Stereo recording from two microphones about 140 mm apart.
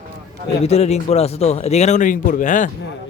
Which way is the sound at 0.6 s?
50° left (ahead or behind).